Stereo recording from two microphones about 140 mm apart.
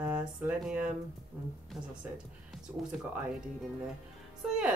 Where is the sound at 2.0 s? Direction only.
10° right (ahead or behind).